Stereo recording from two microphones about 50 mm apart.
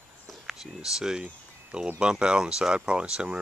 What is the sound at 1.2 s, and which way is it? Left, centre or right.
Speech, right.